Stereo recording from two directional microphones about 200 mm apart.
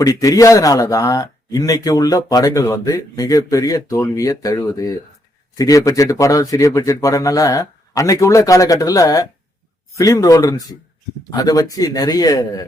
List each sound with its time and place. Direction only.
0.0 s speech: 15° left (ahead or behind)